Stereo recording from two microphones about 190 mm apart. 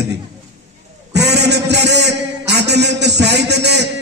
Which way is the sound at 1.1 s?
60° right (ahead or behind).